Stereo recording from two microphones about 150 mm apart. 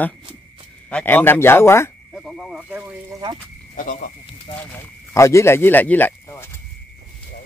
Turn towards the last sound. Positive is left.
turn(degrees=20)  # may be behind; listen again after turning